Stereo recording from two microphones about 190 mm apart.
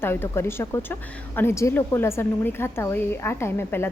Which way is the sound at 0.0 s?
10° left (ahead or behind).